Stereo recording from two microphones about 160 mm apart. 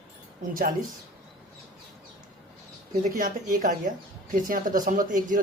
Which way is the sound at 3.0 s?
55° right (ahead or behind).